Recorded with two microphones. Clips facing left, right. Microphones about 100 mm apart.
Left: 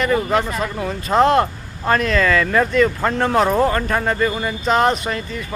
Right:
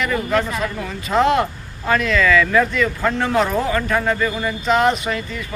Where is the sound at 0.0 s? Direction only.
30° left (ahead or behind).